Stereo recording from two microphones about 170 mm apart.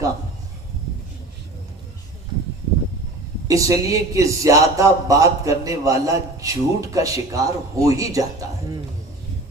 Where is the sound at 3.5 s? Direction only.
20° right (ahead or behind).